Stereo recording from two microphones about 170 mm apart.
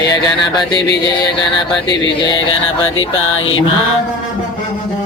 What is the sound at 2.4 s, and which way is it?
Music, 30° left (ahead or behind).